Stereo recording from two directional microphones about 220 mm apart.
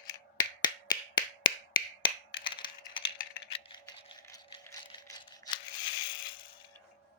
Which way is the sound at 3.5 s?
25° left (ahead or behind).